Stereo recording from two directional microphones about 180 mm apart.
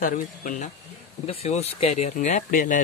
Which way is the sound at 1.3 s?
35° left (ahead or behind).